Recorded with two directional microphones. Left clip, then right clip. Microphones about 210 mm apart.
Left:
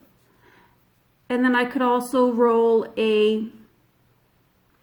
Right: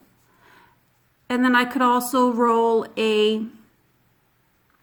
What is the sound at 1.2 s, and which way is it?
Speech, 25° right (ahead or behind).